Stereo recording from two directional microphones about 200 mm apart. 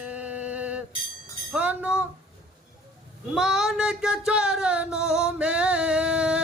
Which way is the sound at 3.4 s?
Centre (ahead or behind).